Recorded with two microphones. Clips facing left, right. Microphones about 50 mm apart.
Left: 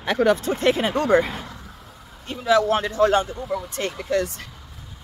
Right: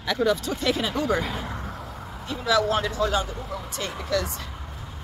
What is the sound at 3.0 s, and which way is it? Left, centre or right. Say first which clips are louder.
Speech: left 6 dB; left.